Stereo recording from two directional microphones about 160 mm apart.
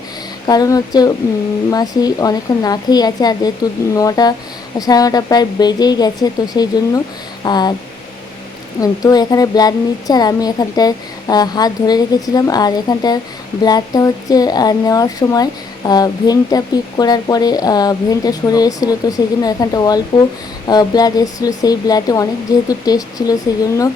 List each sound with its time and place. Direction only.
0.4 s speech: 25° left (ahead or behind)
8.8 s speech: 25° left (ahead or behind)